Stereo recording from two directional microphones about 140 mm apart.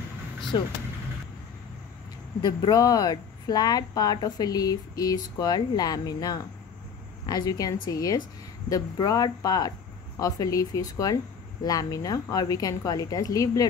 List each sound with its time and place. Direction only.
0.5 s speech: 35° left (ahead or behind)
2.4 s speech: 30° left (ahead or behind)